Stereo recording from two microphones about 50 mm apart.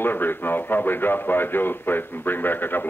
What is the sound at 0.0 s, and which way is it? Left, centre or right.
A man's voice, left.